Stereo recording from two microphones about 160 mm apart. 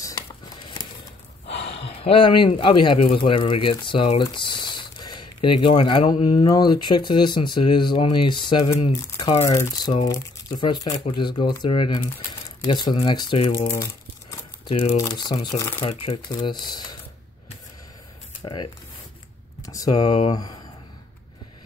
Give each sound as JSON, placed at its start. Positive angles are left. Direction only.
{"t": 0.0, "sound": "a sound", "side_deg": 25}
{"t": 1.7, "sound": "speech", "side_deg": 35}
{"t": 15.0, "sound": "speech", "side_deg": 25}
{"t": 15.8, "sound": "speech", "side_deg": 45}
{"t": 16.3, "sound": "speech", "side_deg": 30}
{"t": 18.4, "sound": "speech", "side_deg": 30}